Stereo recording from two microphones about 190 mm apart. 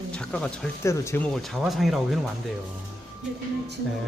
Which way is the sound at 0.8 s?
15° left (ahead or behind).